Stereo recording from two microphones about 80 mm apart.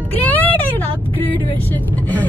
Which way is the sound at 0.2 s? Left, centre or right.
Left.